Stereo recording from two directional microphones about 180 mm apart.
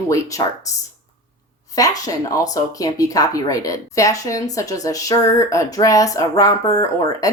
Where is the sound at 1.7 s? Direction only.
20° left (ahead or behind).